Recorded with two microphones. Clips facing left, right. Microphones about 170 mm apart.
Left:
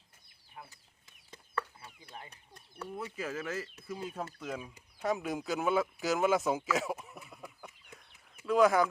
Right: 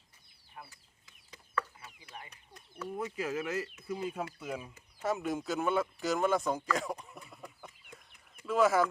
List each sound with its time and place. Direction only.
2.1 s speech: 30° left (ahead or behind)
3.2 s speech: 10° right (ahead or behind)